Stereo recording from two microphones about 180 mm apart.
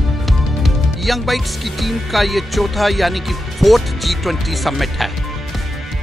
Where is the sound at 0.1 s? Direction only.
Centre (ahead or behind).